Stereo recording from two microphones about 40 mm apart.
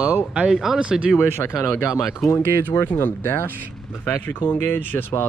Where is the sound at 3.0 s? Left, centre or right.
Left.